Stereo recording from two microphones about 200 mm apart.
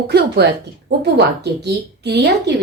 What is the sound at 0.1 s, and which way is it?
Speech, 55° right (ahead or behind).